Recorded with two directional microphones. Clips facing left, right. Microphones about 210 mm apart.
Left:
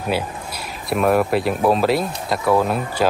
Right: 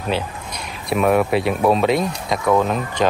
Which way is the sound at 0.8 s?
Centre (ahead or behind).